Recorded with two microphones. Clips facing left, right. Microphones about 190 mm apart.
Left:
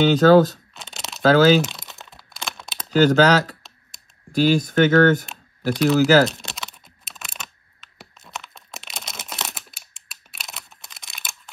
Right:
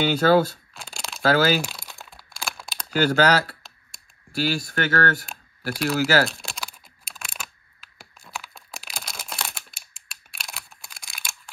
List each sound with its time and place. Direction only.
0.0 s speech: 10° right (ahead or behind)
0.7 s a sound: centre (ahead or behind)
1.2 s speech: 10° right (ahead or behind)
1.6 s crumpling: centre (ahead or behind)
2.9 s speech: 10° right (ahead or behind)
4.4 s a sound: centre (ahead or behind)